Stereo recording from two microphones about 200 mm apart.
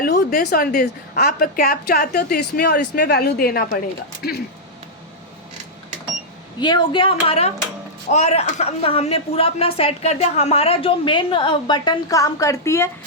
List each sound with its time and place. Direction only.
0.0 s a woman's voice: 55° left (ahead or behind)
6.6 s speech: 20° left (ahead or behind)